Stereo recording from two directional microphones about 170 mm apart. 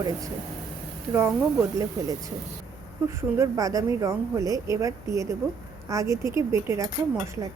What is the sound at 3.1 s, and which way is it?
A woman's voice, 15° right (ahead or behind).